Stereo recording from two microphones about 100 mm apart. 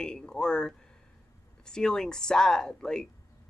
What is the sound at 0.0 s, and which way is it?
Speech, 10° left (ahead or behind).